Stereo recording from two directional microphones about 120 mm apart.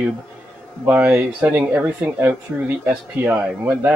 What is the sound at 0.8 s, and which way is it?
A man's voice, 20° right (ahead or behind).